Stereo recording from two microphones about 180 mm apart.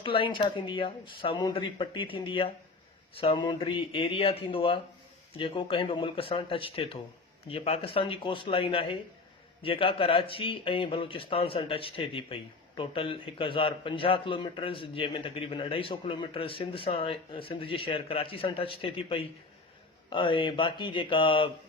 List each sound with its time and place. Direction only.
0.0 s speech: 30° left (ahead or behind)